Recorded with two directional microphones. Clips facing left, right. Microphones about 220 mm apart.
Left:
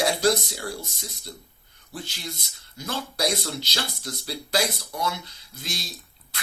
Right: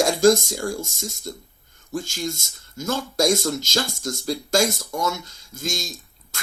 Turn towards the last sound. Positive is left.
turn(degrees=-45)  # may be behind; listen again after turning